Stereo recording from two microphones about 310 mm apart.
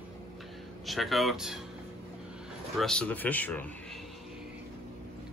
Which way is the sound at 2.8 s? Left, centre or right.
Centre.